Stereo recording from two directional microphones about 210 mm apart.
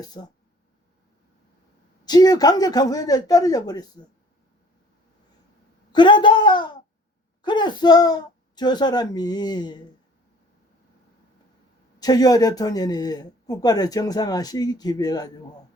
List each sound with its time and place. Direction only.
0.0 s speech: 20° left (ahead or behind)
2.0 s speech: 20° left (ahead or behind)
5.9 s speech: 20° left (ahead or behind)
11.9 s speech: 20° left (ahead or behind)